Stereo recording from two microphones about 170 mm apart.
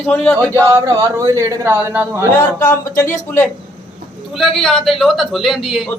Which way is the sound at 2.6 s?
15° left (ahead or behind).